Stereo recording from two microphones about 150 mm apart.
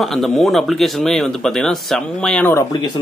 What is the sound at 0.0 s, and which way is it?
Speech, centre (ahead or behind).